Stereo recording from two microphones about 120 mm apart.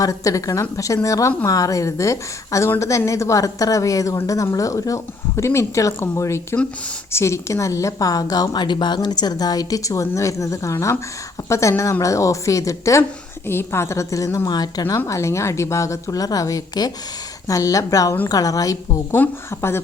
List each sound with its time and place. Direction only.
0.0 s speech: 30° left (ahead or behind)
19.1 s speech: 20° left (ahead or behind)